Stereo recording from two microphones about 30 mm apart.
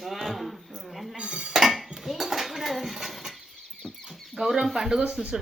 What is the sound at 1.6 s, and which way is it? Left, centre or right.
Dishes, centre.